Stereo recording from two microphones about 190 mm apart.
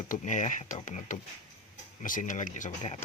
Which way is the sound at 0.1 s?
40° left (ahead or behind).